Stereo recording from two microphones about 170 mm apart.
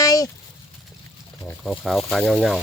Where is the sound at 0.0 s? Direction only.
20° left (ahead or behind).